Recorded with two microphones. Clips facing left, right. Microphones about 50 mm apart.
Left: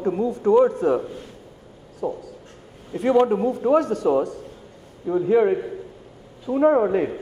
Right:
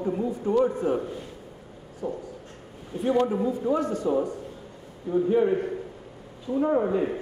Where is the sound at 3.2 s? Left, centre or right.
Left.